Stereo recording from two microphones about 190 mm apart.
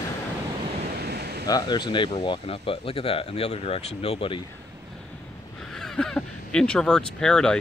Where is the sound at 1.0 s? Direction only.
60° right (ahead or behind).